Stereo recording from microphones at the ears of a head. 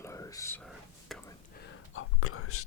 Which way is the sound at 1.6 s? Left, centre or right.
Left.